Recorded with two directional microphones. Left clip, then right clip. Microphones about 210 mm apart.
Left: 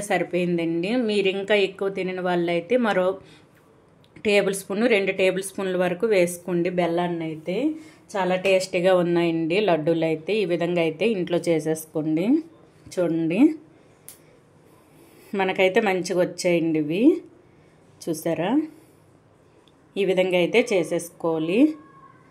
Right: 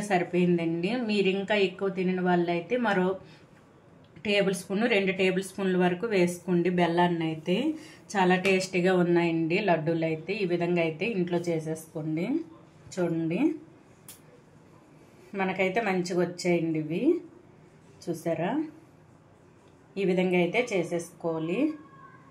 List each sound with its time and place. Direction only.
0.1 s a woman's voice: 30° left (ahead or behind)
4.2 s a woman's voice: 40° left (ahead or behind)
15.3 s a woman's voice: 45° left (ahead or behind)
19.9 s a woman's voice: 45° left (ahead or behind)